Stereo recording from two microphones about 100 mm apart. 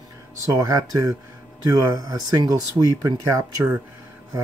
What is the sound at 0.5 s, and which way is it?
Speech, 35° right (ahead or behind).